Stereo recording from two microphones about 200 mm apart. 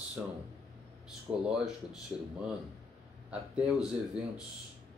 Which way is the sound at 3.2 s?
5° right (ahead or behind).